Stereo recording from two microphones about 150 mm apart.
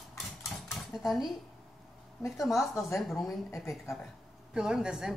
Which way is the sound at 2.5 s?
20° left (ahead or behind).